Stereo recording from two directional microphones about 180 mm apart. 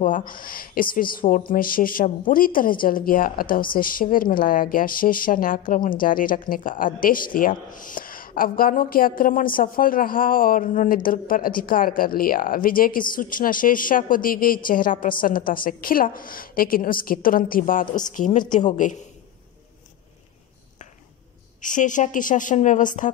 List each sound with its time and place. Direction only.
0.0 s a woman's voice: 50° left (ahead or behind)
21.5 s a woman's voice: 45° left (ahead or behind)